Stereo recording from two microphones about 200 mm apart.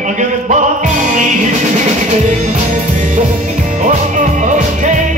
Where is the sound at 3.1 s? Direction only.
40° right (ahead or behind).